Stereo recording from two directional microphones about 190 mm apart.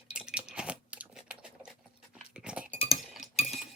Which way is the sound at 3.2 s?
Centre (ahead or behind).